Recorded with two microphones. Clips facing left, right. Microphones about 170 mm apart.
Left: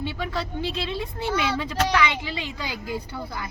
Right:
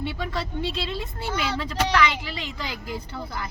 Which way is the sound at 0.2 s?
Centre (ahead or behind).